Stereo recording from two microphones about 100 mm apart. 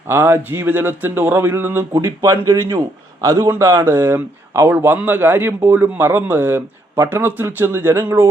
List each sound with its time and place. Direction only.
0.1 s speech: 25° right (ahead or behind)